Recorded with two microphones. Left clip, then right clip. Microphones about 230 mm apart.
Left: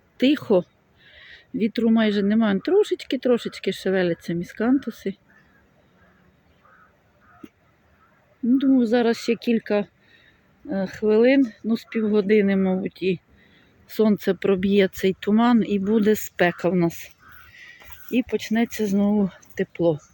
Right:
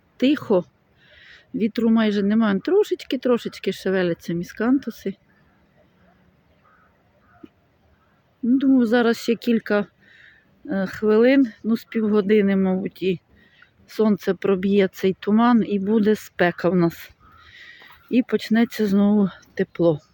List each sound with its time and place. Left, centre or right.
0.2 s speech: centre
8.5 s speech: centre